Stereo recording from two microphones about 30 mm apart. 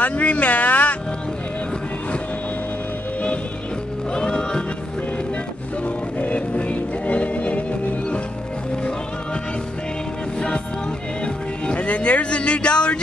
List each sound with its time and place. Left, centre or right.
0.0 s a sound: left
4.1 s music: left
6.1 s music: left
11.2 s music: left